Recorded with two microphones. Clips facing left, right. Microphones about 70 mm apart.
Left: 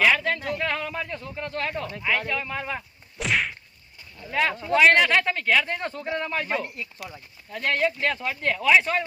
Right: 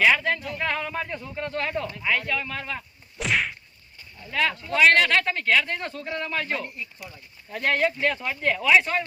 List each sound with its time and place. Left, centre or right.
0.0 s a sound: centre
0.5 s speech: centre
3.2 s whack: centre
4.3 s speech: centre
4.5 s speech: left
4.8 s speech: centre
7.9 s speech: centre